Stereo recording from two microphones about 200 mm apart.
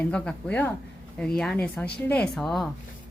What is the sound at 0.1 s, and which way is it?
A woman's voice, 5° left (ahead or behind).